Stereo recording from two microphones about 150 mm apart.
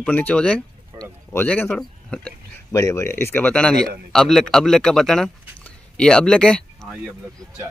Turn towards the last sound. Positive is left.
turn(degrees=5)  # may be behind; listen again after turning